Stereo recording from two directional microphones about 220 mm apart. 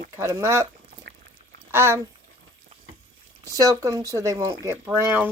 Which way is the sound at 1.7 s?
10° right (ahead or behind).